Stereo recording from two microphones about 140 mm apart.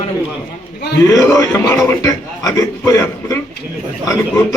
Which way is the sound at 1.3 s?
25° left (ahead or behind).